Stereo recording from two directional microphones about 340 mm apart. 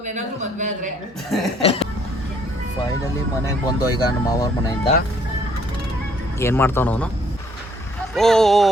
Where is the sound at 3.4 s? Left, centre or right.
Centre.